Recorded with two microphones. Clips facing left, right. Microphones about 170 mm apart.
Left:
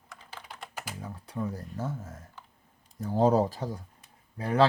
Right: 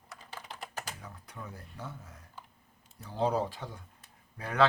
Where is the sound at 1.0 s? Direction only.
30° left (ahead or behind).